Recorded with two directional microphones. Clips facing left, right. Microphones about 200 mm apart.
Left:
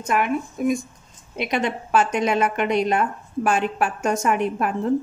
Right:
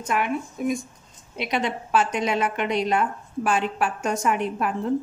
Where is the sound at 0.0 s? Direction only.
50° left (ahead or behind).